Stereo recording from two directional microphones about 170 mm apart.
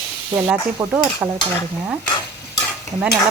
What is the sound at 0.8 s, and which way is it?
Stir, 25° right (ahead or behind).